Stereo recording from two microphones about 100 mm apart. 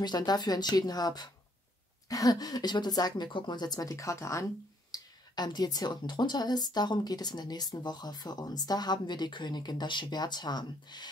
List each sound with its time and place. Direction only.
0.0 s a woman's voice: 45° left (ahead or behind)
4.9 s speech: 45° left (ahead or behind)